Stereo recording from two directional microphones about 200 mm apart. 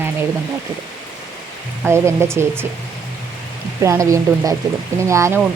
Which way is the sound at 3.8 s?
15° right (ahead or behind).